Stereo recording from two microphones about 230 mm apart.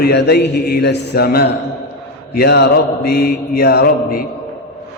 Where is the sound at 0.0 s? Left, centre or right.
Left.